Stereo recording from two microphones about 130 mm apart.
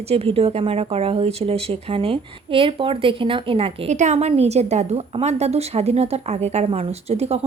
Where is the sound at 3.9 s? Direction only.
65° right (ahead or behind).